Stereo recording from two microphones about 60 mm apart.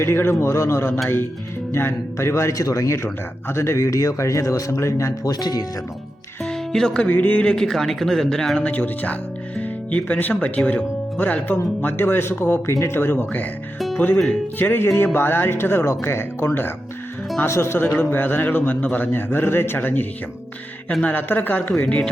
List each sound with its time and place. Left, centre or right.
0.0 s speech: left
6.4 s speech: centre
7.1 s speech: left
7.4 s speech: centre
8.6 s speech: left
11.2 s a man's voice: left
13.7 s music: centre
14.6 s a man's voice: left
21.7 s speech: centre